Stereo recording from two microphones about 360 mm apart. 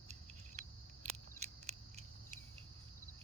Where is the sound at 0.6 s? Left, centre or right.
Centre.